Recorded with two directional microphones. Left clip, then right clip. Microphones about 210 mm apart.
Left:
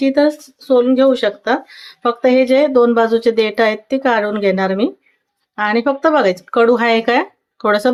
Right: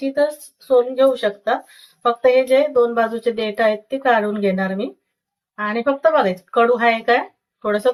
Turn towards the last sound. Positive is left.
turn(degrees=45)  # may be behind; listen again after turning